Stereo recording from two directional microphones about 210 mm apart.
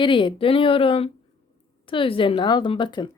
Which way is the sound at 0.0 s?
25° left (ahead or behind).